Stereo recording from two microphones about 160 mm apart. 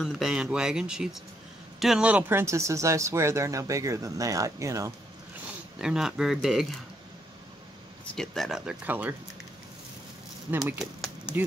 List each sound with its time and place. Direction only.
0.0 s speech: 5° right (ahead or behind); by 4.9 s 20° right (ahead or behind)
5.8 s speech: 5° right (ahead or behind)
8.2 s speech: centre (ahead or behind)